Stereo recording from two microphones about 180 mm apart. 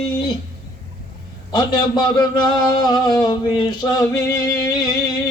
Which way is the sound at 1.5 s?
25° left (ahead or behind).